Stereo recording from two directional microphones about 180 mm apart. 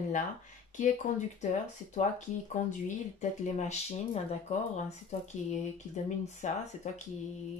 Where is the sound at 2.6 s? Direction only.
45° left (ahead or behind).